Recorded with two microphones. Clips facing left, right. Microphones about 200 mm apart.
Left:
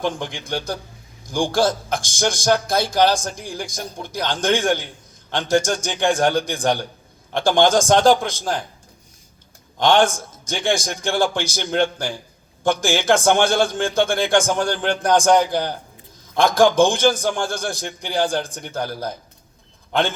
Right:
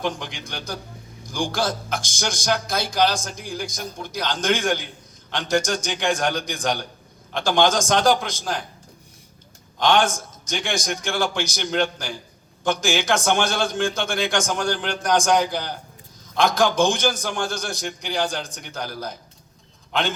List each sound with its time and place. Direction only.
0.3 s a man's voice: 55° left (ahead or behind)
9.8 s a man's voice: 55° left (ahead or behind)